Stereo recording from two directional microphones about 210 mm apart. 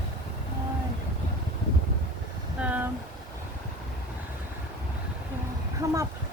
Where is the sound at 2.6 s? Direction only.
5° right (ahead or behind).